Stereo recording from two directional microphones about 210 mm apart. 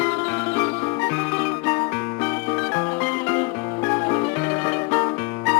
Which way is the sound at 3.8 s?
20° left (ahead or behind).